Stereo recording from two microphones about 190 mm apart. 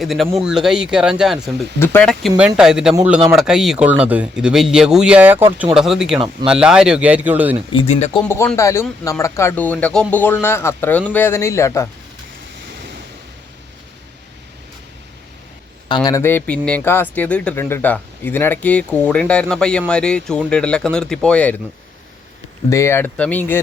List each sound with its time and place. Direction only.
0.0 s speech: centre (ahead or behind)
1.8 s speech: 10° left (ahead or behind); by 7.5 s 10° right (ahead or behind)
7.7 s speech: 30° left (ahead or behind)
8.2 s speech: 10° left (ahead or behind)
16.0 s speech: 15° left (ahead or behind)
22.7 s speech: 15° left (ahead or behind)